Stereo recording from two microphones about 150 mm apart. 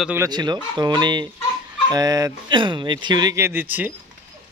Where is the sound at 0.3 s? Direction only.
30° right (ahead or behind).